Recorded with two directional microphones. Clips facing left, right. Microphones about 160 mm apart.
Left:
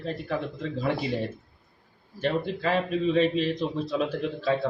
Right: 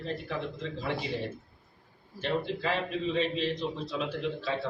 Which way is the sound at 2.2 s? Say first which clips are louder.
Left 4 dB; 50° left (ahead or behind).